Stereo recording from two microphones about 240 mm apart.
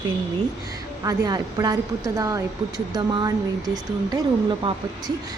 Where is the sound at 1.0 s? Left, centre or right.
Centre.